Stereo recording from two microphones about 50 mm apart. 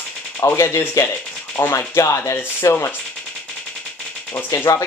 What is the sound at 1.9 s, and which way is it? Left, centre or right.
Speech, left.